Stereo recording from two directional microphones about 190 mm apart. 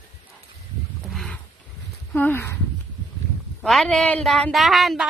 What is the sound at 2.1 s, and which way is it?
Speech, 10° left (ahead or behind).